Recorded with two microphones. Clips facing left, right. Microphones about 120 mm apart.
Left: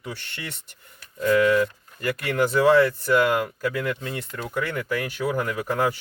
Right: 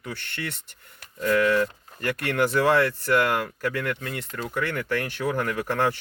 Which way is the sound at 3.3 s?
15° left (ahead or behind).